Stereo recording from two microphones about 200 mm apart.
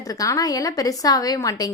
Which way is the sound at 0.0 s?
15° left (ahead or behind).